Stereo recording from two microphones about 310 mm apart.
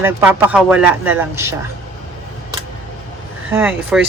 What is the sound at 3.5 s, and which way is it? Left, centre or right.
Speech, centre.